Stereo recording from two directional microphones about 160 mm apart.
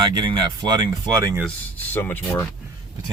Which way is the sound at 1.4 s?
10° left (ahead or behind).